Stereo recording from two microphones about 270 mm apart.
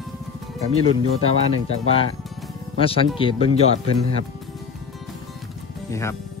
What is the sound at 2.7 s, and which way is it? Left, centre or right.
Speech, centre.